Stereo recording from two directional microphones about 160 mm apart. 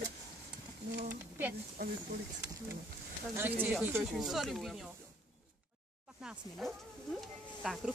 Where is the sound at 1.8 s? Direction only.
65° right (ahead or behind).